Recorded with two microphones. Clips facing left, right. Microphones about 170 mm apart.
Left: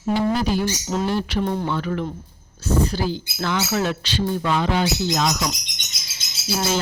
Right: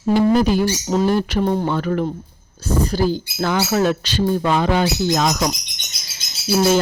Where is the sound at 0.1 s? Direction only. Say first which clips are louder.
Right 6 dB; 50° right (ahead or behind).